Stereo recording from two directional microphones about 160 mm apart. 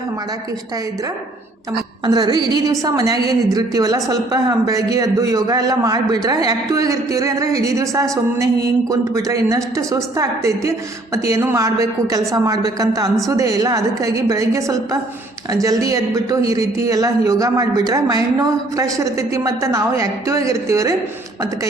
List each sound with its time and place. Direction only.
1.7 s a woman's voice: 25° right (ahead or behind)